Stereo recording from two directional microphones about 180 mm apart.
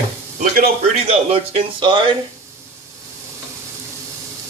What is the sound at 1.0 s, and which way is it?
Speech, 30° right (ahead or behind).